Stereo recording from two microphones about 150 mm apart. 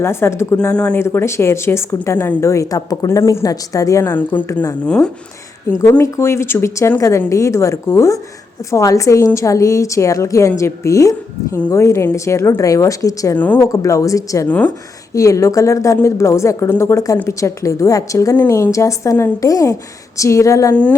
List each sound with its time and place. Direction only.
0.0 s a woman's voice: 15° left (ahead or behind)
0.8 s a woman's voice: 5° left (ahead or behind)
1.0 s speech: 20° left (ahead or behind)
4.9 s speech: 5° left (ahead or behind)
5.8 s speech: 20° left (ahead or behind)
13.3 s a woman's voice: 10° left (ahead or behind)
13.7 s speech: 20° left (ahead or behind)
14.4 s a woman's voice: 10° left (ahead or behind)
15.1 s speech: 20° left (ahead or behind)